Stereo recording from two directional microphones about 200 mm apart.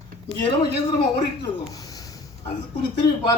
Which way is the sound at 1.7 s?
20° left (ahead or behind).